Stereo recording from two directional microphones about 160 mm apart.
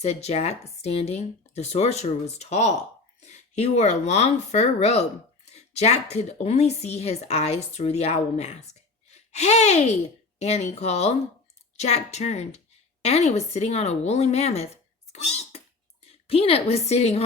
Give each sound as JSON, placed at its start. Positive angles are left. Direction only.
{"t": 0.0, "sound": "a woman's voice", "side_deg": 40}
{"t": 15.1, "sound": "a sound", "side_deg": 40}
{"t": 16.2, "sound": "speech", "side_deg": 40}